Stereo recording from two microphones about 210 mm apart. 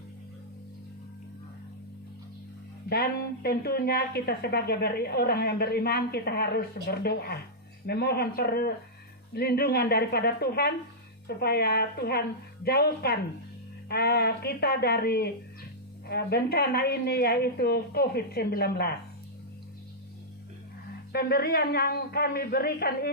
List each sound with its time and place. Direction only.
2.9 s a woman's voice: 50° left (ahead or behind)
21.1 s a woman's voice: 50° left (ahead or behind)